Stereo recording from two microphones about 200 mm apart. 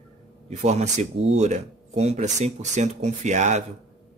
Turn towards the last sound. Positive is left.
turn(degrees=-35)  # may be behind; listen again after turning